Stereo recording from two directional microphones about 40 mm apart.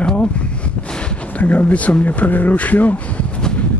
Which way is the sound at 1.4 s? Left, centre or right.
Left.